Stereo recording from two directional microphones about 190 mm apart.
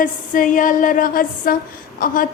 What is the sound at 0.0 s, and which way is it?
A woman's voice, 45° left (ahead or behind).